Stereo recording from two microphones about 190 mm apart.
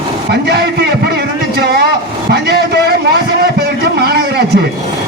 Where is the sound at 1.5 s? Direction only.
55° right (ahead or behind).